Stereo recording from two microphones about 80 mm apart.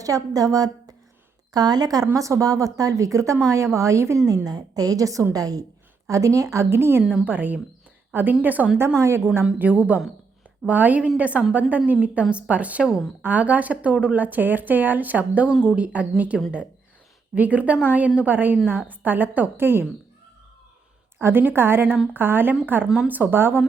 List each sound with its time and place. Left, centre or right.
0.0 s a woman's voice: right
4.4 s a woman's voice: right
7.0 s a woman's voice: centre
7.3 s speech: right
9.0 s speech: right
9.4 s a woman's voice: centre
21.2 s speech: right